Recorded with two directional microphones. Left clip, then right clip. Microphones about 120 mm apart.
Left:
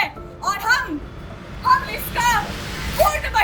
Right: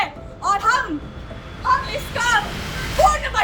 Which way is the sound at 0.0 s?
20° right (ahead or behind).